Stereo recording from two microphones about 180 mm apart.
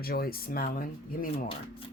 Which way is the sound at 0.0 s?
55° left (ahead or behind).